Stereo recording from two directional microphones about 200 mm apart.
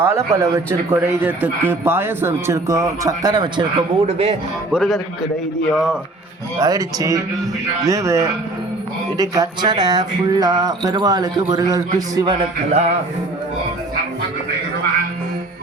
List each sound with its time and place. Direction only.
0.0 s speech: 15° right (ahead or behind); by 4.4 s 30° right (ahead or behind)
4.7 s a man's voice: centre (ahead or behind)
6.6 s speech: 15° right (ahead or behind)